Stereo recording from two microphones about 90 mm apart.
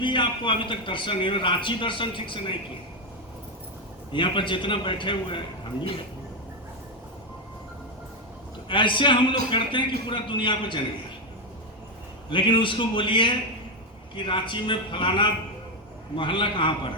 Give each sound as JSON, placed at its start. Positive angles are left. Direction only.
{"t": 0.0, "sound": "a man's voice", "side_deg": 65}
{"t": 4.1, "sound": "a man's voice", "side_deg": 65}
{"t": 8.7, "sound": "a man's voice", "side_deg": 65}
{"t": 12.3, "sound": "a man's voice", "side_deg": 65}